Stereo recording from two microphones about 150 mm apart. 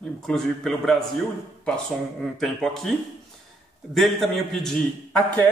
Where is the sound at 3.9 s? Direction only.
Centre (ahead or behind).